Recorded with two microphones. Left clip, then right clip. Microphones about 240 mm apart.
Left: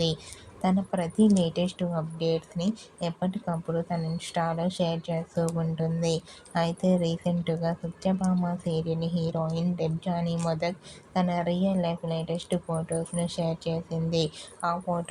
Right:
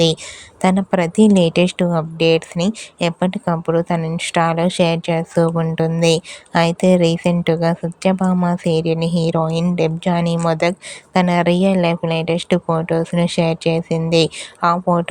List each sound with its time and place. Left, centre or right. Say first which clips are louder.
0.6 s a woman's voice: right 12 dB; right